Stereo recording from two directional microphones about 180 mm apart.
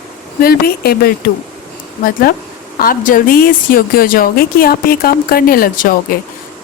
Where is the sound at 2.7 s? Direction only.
50° left (ahead or behind).